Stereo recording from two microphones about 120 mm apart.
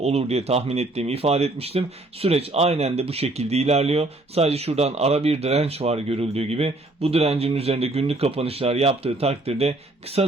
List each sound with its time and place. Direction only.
0.0 s speech: 60° right (ahead or behind)